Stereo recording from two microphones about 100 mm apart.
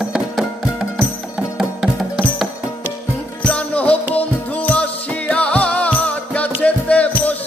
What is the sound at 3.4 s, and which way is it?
Music, 10° left (ahead or behind).